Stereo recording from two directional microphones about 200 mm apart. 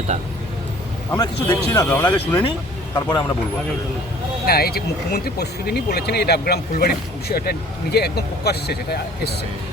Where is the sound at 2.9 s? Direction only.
20° left (ahead or behind).